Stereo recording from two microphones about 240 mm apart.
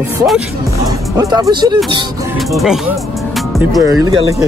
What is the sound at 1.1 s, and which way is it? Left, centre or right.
Speech, centre.